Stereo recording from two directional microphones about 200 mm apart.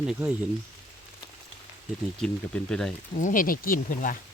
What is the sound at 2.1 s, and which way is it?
Speech, 5° left (ahead or behind).